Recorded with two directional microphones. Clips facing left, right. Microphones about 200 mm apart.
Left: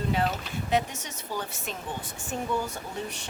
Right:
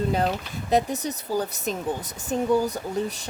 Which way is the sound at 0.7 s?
40° right (ahead or behind).